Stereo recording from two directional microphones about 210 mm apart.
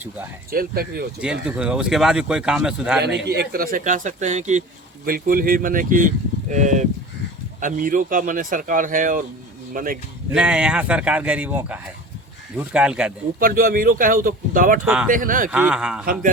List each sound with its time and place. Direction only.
0.5 s speech: 45° right (ahead or behind)
1.2 s speech: 5° right (ahead or behind)
3.2 s speech: 45° right (ahead or behind)
10.3 s speech: 5° right (ahead or behind)
13.4 s speech: 45° right (ahead or behind)
15.4 s speech: 5° right (ahead or behind)